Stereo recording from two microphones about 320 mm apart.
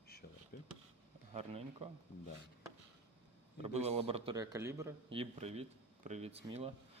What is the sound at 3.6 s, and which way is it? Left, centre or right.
A man's voice, centre.